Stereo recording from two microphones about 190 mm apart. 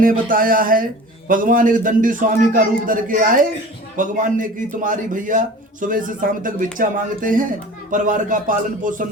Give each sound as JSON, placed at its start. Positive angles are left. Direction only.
{"t": 0.0, "sound": "a man's voice", "side_deg": -45}